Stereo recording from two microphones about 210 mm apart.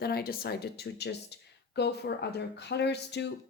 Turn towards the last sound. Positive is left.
turn(degrees=55)  # may be behind; listen again after turning